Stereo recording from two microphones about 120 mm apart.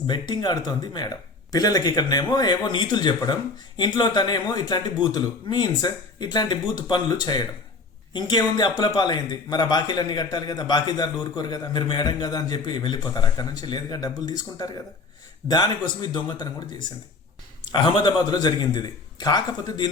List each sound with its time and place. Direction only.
0.1 s a man's voice: 35° left (ahead or behind)